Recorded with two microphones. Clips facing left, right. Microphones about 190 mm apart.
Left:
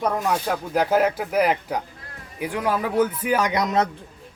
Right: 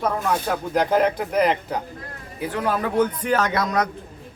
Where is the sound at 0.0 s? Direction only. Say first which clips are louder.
Even; 10° left (ahead or behind).